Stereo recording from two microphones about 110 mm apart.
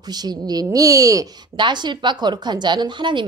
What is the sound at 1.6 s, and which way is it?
Speech, 45° right (ahead or behind).